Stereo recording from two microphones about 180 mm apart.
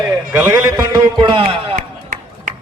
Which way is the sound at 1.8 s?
50° right (ahead or behind).